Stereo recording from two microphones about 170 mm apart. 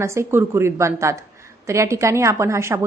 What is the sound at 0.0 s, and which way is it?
A woman's voice, 15° right (ahead or behind).